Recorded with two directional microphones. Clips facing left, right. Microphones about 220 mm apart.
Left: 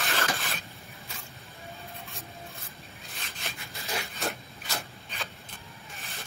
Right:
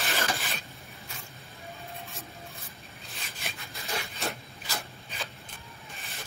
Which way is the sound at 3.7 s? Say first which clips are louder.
Left 1 dB; centre (ahead or behind).